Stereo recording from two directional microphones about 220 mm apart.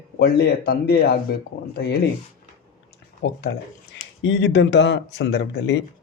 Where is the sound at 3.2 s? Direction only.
55° left (ahead or behind).